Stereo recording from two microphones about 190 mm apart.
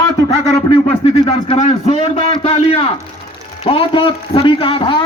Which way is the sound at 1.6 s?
35° left (ahead or behind).